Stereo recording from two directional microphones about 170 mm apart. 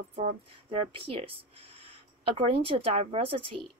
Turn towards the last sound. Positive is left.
turn(degrees=-30)  # may be behind; listen again after turning